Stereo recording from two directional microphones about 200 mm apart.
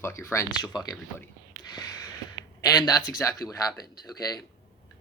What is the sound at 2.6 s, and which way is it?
Speech, 20° left (ahead or behind).